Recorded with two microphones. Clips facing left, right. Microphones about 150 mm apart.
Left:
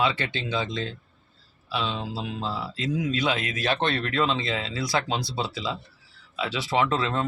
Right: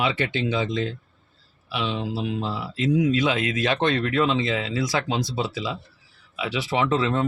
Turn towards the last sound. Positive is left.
turn(degrees=-15)  # may be behind; listen again after turning